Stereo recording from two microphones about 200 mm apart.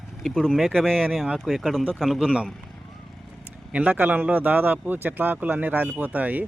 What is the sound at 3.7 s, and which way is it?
Speech, 5° right (ahead or behind).